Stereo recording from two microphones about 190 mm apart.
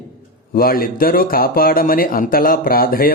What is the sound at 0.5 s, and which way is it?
Speech, 50° left (ahead or behind).